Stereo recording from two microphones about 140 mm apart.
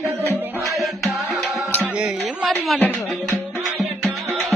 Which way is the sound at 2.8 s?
15° left (ahead or behind).